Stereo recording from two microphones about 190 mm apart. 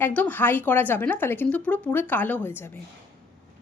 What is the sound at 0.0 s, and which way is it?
Speech, 10° left (ahead or behind).